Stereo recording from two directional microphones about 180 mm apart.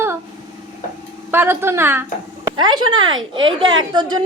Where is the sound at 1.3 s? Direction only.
10° right (ahead or behind).